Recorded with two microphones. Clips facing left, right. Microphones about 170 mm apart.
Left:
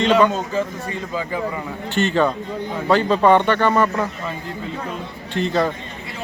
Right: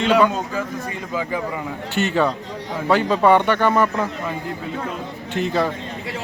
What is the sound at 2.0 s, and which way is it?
Speech, 10° right (ahead or behind).